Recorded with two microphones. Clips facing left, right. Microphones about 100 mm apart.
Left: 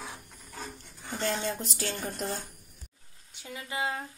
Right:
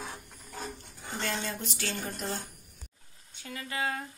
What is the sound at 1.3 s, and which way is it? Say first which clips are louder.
Speech: left 3 dB; 25° left (ahead or behind).